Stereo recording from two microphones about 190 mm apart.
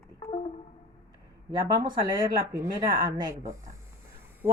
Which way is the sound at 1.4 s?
20° right (ahead or behind).